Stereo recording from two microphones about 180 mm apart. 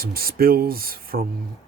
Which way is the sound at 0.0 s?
55° right (ahead or behind).